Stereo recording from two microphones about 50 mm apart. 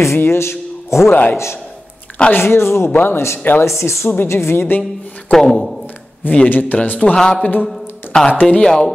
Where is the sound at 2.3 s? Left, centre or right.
Left.